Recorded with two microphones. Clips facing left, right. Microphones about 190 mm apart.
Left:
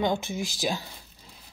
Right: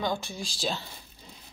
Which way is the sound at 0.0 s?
20° left (ahead or behind).